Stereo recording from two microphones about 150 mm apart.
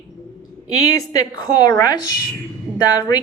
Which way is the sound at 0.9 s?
25° left (ahead or behind).